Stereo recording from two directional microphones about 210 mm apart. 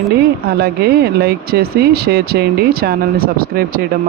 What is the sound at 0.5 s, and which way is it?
Speech, 50° right (ahead or behind).